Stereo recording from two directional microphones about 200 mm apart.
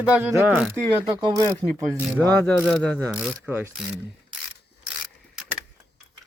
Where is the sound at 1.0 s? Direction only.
20° right (ahead or behind).